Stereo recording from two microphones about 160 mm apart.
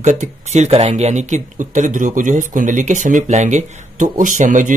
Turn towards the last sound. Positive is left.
turn(degrees=-50)  # may be behind; listen again after turning